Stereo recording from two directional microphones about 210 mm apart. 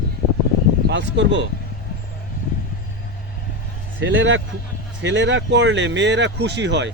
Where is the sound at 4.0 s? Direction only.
60° right (ahead or behind).